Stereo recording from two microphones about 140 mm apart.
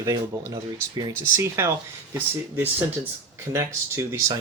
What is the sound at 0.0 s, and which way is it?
Speech, 25° right (ahead or behind).